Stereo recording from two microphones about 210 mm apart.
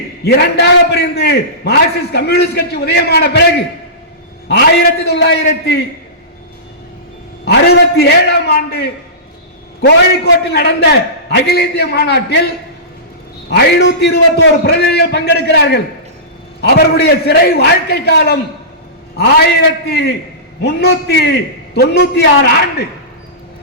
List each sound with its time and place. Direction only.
0.3 s a man's voice: 50° left (ahead or behind)
4.4 s a man's voice: 50° left (ahead or behind)
7.4 s a man's voice: 50° left (ahead or behind)
13.5 s a man's voice: 50° left (ahead or behind)